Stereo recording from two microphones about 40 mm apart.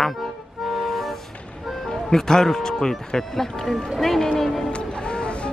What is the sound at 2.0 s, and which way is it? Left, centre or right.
Speech, centre.